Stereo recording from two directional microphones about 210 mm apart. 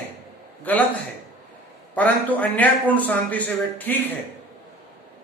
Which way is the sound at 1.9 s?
5° left (ahead or behind).